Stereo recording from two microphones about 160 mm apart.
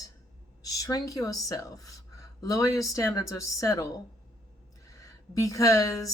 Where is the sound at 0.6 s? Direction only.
25° left (ahead or behind).